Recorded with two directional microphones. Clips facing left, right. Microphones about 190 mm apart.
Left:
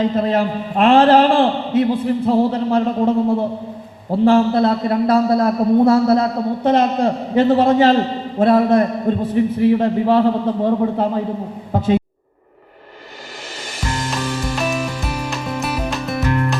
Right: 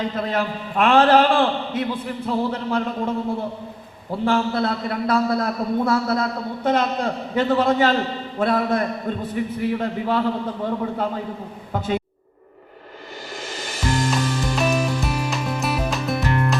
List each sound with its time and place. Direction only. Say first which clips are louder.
0.0 s a man's voice: left 7 dB; 35° left (ahead or behind)
14.4 s music: right 1 dB; centre (ahead or behind)